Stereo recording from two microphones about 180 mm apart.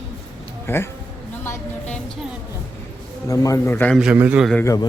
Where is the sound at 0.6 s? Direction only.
15° left (ahead or behind).